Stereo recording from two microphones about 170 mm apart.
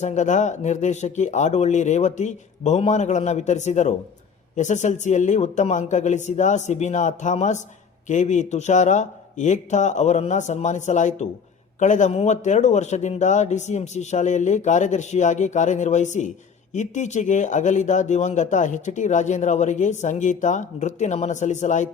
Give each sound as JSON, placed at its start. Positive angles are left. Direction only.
{"t": 0.0, "sound": "speech", "side_deg": 45}